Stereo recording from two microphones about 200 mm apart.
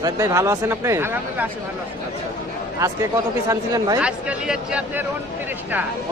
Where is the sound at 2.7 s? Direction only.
15° right (ahead or behind).